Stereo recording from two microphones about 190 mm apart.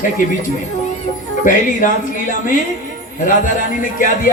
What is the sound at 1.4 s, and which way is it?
A man's voice, 45° left (ahead or behind).